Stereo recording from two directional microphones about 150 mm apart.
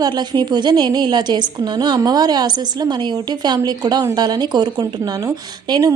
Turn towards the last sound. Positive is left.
turn(degrees=-25)  # may be behind; listen again after turning